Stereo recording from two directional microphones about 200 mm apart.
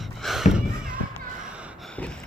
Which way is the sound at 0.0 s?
Centre (ahead or behind).